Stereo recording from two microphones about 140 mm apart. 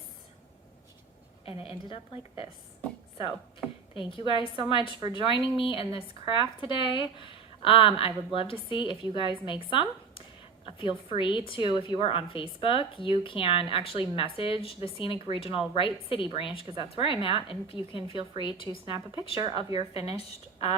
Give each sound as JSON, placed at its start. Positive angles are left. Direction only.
{"t": 1.5, "sound": "speech", "side_deg": 40}
{"t": 3.9, "sound": "speech", "side_deg": 40}
{"t": 4.9, "sound": "speech", "side_deg": -30}
{"t": 5.3, "sound": "speech", "side_deg": 40}
{"t": 10.7, "sound": "a sound", "side_deg": 35}
{"t": 11.2, "sound": "speech", "side_deg": 35}
{"t": 19.4, "sound": "speech", "side_deg": -30}
{"t": 19.9, "sound": "a woman's voice", "side_deg": 45}